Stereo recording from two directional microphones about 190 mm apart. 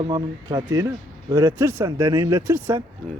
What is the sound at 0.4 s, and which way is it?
Speech, 15° right (ahead or behind).